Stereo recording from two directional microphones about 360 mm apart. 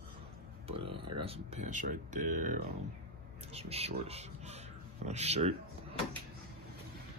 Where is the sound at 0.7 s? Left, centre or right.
Centre.